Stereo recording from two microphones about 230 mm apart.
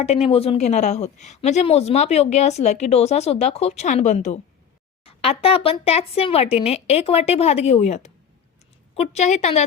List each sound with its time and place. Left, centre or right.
0.0 s a woman's voice: left